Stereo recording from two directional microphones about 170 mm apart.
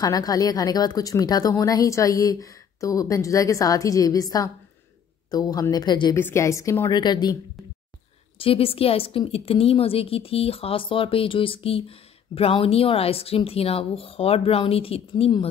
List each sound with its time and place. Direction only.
0.0 s speech: 20° left (ahead or behind)
6.1 s a woman's voice: 15° left (ahead or behind)
8.4 s a woman's voice: 35° left (ahead or behind)